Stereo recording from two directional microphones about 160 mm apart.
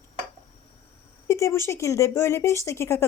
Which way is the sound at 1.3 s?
20° left (ahead or behind).